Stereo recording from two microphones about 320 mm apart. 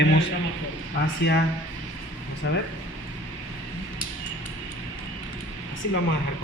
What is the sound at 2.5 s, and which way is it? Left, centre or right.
Speech, left.